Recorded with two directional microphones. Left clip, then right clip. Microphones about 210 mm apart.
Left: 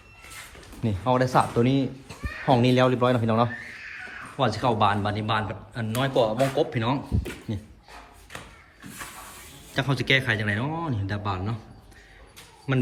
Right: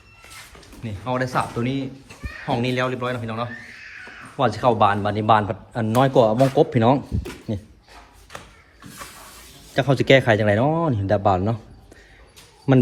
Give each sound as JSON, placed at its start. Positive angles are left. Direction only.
{"t": 0.8, "sound": "speech", "side_deg": 20}
{"t": 4.4, "sound": "a man's voice", "side_deg": 5}
{"t": 6.7, "sound": "a man's voice", "side_deg": -5}
{"t": 9.7, "sound": "a man's voice", "side_deg": 0}
{"t": 12.7, "sound": "a man's voice", "side_deg": -10}